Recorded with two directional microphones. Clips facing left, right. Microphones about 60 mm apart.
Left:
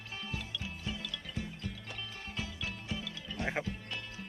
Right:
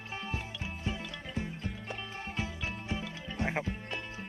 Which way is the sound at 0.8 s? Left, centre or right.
Right.